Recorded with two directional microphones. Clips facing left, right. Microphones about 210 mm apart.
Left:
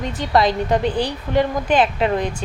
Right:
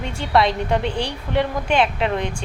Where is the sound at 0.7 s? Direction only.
35° left (ahead or behind).